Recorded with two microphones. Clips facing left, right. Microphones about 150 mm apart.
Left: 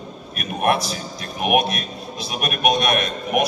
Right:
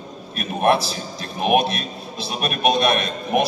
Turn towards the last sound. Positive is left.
turn(degrees=-30)  # may be behind; listen again after turning